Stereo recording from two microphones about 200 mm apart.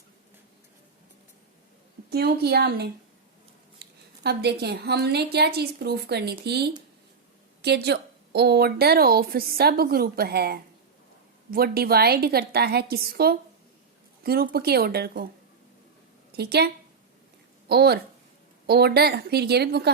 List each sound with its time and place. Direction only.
2.0 s a woman's voice: 50° right (ahead or behind)
16.3 s a woman's voice: 55° right (ahead or behind)